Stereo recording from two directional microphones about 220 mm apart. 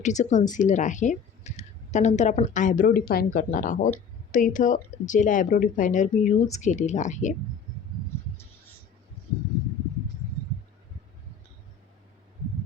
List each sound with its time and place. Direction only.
0.0 s speech: 35° left (ahead or behind)